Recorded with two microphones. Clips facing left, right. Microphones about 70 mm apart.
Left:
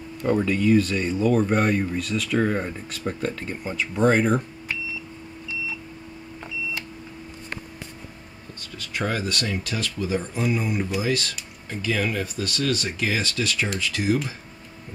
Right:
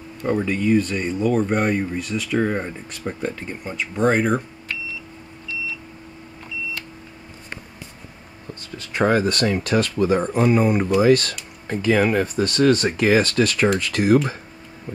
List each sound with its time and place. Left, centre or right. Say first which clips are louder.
0.2 s speech: even; centre
3.7 s speech: right 1 dB; centre
8.7 s speech: right 8 dB; right